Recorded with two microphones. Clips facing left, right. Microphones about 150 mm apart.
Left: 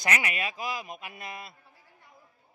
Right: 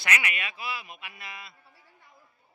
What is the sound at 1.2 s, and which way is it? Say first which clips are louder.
Mantra: left 4 dB; 45° left (ahead or behind).